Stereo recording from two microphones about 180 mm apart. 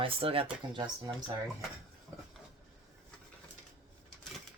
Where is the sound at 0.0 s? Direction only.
30° right (ahead or behind).